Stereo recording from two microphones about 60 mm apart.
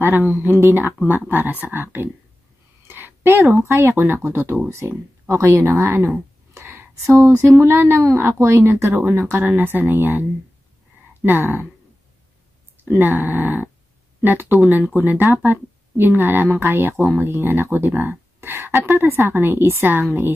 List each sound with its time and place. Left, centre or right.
0.3 s speech: right
11.2 s speech: right
12.8 s speech: right